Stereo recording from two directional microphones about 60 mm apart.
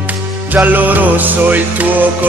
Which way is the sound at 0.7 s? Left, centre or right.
Right.